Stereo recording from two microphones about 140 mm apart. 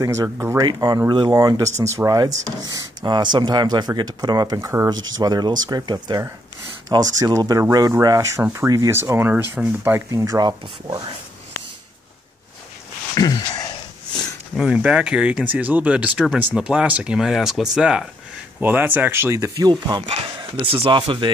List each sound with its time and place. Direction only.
0.0 s speech: 20° right (ahead or behind)
13.1 s a sound: 25° left (ahead or behind)
14.5 s speech: 5° right (ahead or behind); by 21.3 s 35° right (ahead or behind)